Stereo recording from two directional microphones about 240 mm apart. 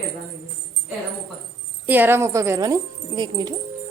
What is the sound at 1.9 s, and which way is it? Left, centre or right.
Speech, centre.